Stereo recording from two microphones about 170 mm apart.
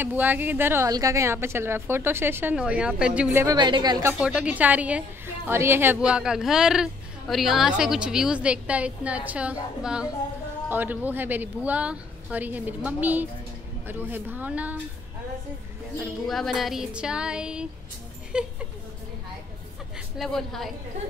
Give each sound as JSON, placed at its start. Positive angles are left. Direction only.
{"t": 0.0, "sound": "a woman's voice", "side_deg": -10}
{"t": 3.4, "sound": "speech", "side_deg": -25}
{"t": 4.1, "sound": "a woman's voice", "side_deg": -5}
{"t": 16.3, "sound": "a woman's voice", "side_deg": 0}
{"t": 20.2, "sound": "a woman's voice", "side_deg": 0}